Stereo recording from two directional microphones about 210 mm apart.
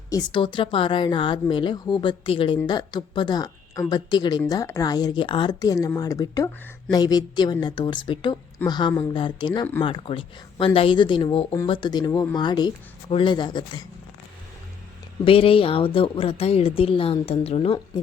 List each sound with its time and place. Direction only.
0.1 s a woman's voice: 20° left (ahead or behind)
15.2 s a woman's voice: 25° left (ahead or behind)